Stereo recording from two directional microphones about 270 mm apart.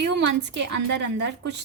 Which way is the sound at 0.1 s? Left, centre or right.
Right.